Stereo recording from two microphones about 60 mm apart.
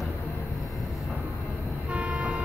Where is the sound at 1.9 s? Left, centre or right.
Right.